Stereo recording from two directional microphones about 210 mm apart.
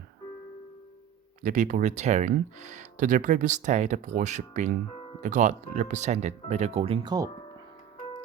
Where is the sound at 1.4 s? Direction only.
40° right (ahead or behind); by 7.3 s 20° right (ahead or behind).